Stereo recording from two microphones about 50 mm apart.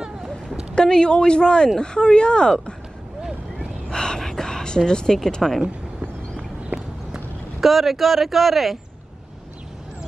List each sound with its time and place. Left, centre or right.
0.7 s speech: centre
3.9 s a woman's voice: centre
6.7 s horse: right
7.6 s speech: centre